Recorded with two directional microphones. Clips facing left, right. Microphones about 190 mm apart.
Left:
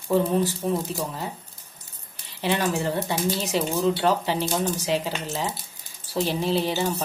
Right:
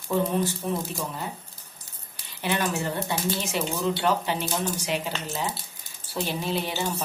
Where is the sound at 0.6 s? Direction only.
25° left (ahead or behind).